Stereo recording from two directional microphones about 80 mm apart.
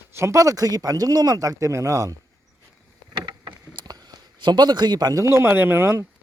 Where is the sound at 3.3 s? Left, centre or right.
Right.